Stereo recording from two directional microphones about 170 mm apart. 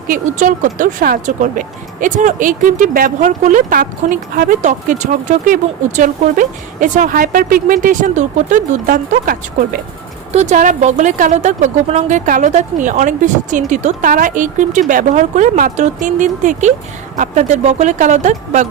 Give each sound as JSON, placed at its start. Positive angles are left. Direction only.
{"t": 0.1, "sound": "speech", "side_deg": -50}
{"t": 10.3, "sound": "speech", "side_deg": -45}